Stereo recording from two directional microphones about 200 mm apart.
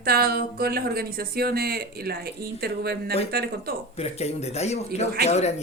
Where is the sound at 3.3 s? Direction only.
50° right (ahead or behind).